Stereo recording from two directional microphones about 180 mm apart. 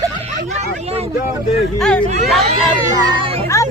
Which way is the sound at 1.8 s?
5° left (ahead or behind).